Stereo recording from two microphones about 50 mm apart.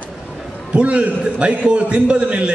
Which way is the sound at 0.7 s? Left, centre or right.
Right.